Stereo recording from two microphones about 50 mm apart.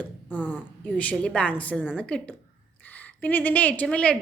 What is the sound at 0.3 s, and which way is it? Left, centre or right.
A woman's voice, left.